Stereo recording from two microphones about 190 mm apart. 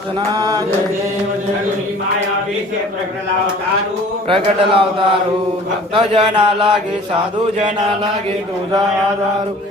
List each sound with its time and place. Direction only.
0.3 s chant: 20° right (ahead or behind)
4.3 s chant: 30° right (ahead or behind)